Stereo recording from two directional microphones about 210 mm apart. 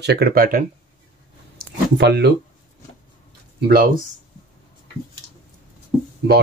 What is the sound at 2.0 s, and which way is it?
Speech, 50° right (ahead or behind).